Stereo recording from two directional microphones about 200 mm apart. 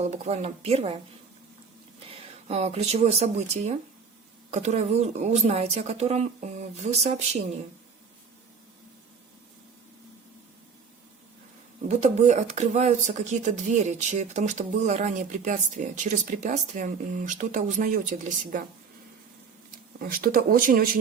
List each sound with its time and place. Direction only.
0.0 s speech: 35° right (ahead or behind)
2.0 s speech: 30° right (ahead or behind)
11.9 s speech: 35° right (ahead or behind)
20.0 s speech: 45° right (ahead or behind)